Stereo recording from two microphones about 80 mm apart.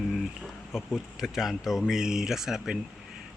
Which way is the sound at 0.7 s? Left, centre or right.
Centre.